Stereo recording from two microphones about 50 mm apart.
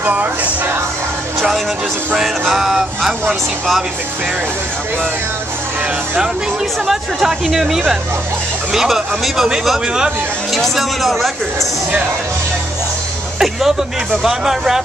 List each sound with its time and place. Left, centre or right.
0.0 s speech: right
2.1 s speech: centre
6.9 s speech: centre
10.5 s speech: centre
13.4 s speech: centre